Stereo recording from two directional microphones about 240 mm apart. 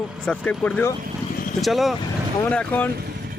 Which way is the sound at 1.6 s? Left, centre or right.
Centre.